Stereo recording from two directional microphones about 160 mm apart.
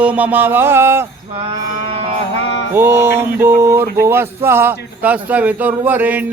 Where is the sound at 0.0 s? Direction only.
10° right (ahead or behind).